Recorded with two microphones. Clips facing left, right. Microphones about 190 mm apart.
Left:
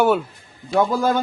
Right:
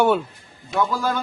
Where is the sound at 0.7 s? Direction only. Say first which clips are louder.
Left 4 dB; 40° left (ahead or behind).